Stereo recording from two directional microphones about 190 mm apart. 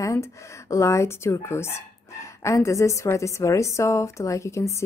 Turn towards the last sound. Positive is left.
turn(degrees=15)  # may be behind; listen again after turning